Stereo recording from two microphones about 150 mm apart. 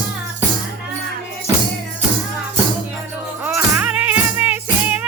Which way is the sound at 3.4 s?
10° right (ahead or behind).